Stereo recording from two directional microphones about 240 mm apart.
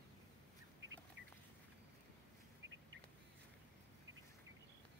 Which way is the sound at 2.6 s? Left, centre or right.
Right.